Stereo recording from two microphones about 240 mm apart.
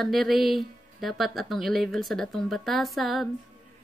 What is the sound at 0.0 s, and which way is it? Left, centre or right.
Speech, centre.